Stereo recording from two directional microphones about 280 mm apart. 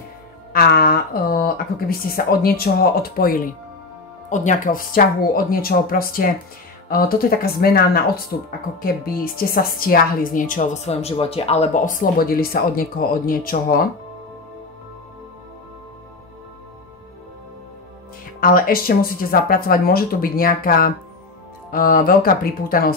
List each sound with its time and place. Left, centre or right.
0.5 s speech: left
18.4 s speech: left